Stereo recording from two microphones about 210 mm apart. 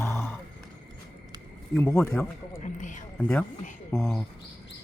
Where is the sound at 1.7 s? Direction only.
10° left (ahead or behind).